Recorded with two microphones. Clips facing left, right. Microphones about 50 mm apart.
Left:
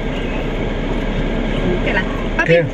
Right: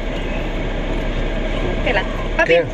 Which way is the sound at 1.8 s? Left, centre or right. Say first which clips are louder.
Left 1 dB; left.